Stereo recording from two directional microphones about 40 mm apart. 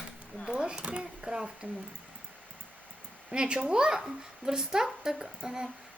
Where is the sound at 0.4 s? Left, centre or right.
Right.